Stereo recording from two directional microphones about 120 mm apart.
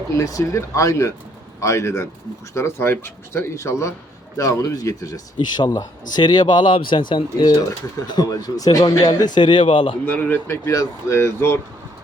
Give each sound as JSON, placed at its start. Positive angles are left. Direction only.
{"t": 0.2, "sound": "speech", "side_deg": 25}
{"t": 10.1, "sound": "speech", "side_deg": 15}